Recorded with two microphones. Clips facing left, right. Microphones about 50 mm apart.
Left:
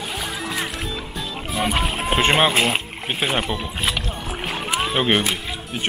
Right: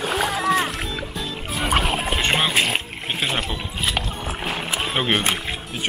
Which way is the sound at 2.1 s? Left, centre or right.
Centre.